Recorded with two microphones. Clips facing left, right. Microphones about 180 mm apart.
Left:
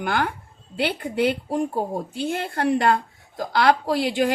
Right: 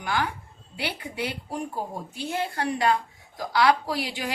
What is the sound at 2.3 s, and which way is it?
A woman's voice, 55° left (ahead or behind).